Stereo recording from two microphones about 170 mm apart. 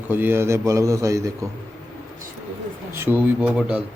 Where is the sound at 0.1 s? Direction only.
10° right (ahead or behind).